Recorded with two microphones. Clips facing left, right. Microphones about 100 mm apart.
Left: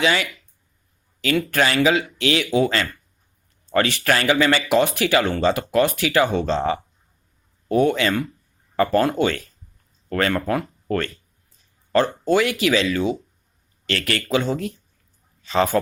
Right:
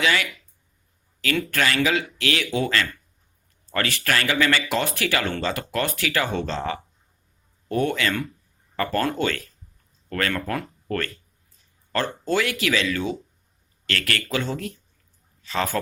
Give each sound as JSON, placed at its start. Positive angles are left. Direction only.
{"t": 0.0, "sound": "speech", "side_deg": 25}